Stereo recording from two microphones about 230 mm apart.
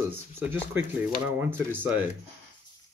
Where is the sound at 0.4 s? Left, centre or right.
Centre.